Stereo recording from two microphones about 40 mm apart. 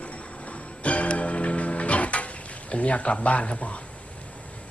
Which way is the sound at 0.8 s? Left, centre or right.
Left.